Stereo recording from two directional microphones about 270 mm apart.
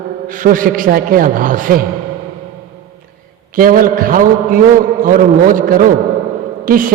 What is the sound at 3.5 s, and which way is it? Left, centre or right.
A woman's voice, right.